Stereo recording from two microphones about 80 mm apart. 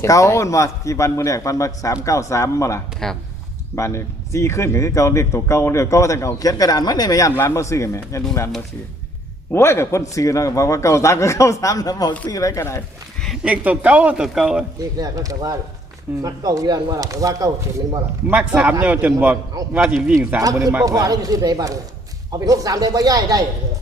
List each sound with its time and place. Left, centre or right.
0.0 s speech: left
9.5 s speech: left
13.4 s speech: centre
14.9 s speech: right
18.3 s a man's voice: centre
20.4 s speech: right